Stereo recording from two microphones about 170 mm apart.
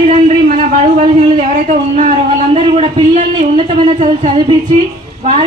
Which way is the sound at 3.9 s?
35° right (ahead or behind).